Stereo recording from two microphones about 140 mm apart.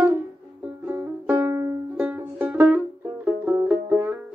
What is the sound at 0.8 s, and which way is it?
Music, 15° right (ahead or behind).